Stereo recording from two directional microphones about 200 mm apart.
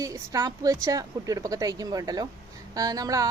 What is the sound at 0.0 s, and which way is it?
A woman's voice, 15° right (ahead or behind).